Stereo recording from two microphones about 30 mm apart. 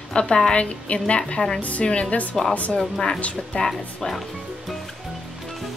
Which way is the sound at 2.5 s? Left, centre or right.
Left.